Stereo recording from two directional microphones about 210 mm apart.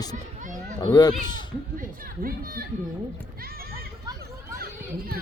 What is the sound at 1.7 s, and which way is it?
Speech, 40° right (ahead or behind).